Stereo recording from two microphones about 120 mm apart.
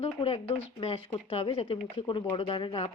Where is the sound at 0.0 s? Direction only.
55° left (ahead or behind).